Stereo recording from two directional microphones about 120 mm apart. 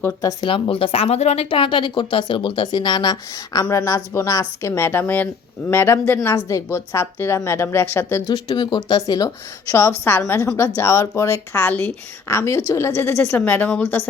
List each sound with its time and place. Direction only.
0.4 s speech: 50° left (ahead or behind); by 8.2 s 20° left (ahead or behind)
8.3 s speech: 40° left (ahead or behind); by 14.1 s 15° left (ahead or behind)